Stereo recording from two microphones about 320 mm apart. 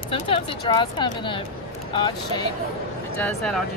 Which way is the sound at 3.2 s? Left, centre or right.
Centre.